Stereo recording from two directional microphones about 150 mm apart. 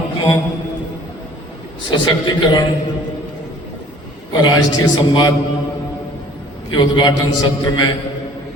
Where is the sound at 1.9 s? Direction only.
30° left (ahead or behind).